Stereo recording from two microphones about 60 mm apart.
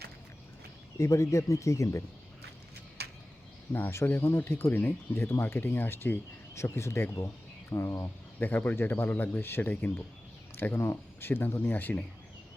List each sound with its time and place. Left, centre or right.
0.9 s speech: left
3.7 s speech: left
6.5 s speech: left
8.4 s speech: left